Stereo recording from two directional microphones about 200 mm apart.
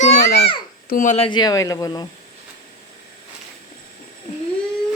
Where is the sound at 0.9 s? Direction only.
40° left (ahead or behind); by 2.1 s 20° left (ahead or behind).